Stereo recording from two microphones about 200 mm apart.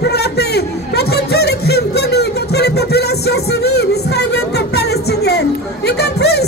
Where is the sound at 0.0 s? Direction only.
55° left (ahead or behind).